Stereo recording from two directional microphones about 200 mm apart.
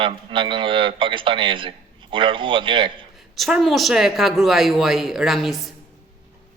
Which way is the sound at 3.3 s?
Centre (ahead or behind).